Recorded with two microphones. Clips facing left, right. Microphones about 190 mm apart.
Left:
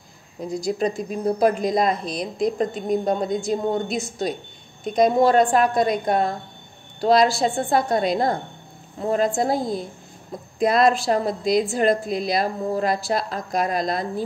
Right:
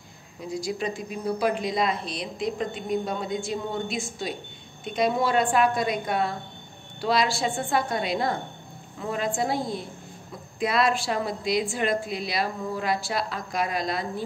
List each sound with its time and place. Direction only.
0.5 s speech: 40° left (ahead or behind)